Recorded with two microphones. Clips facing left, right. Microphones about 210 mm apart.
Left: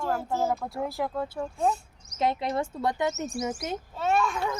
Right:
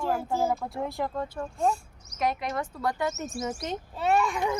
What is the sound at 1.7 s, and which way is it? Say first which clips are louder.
Speech: even; 25° left (ahead or behind).